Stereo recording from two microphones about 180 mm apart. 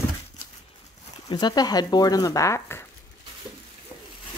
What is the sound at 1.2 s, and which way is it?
Speech, 20° left (ahead or behind).